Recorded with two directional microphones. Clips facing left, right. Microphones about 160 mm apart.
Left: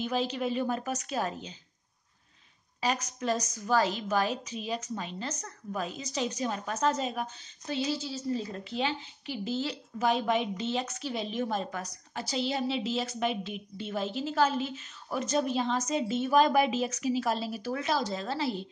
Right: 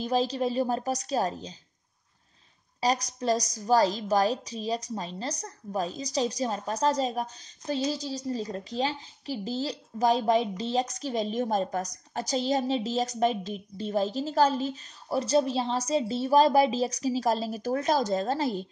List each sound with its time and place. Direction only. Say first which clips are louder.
0.0 s a woman's voice: right 4 dB; 35° right (ahead or behind)
2.8 s a woman's voice: right 4 dB; 35° right (ahead or behind)